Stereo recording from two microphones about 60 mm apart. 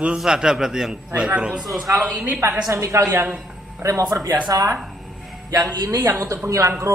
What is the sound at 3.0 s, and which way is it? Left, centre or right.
Speech, right.